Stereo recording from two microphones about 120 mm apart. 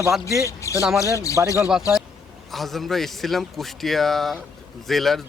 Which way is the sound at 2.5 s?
Centre (ahead or behind).